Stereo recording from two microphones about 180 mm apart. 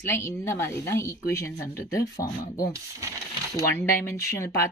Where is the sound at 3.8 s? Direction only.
15° left (ahead or behind).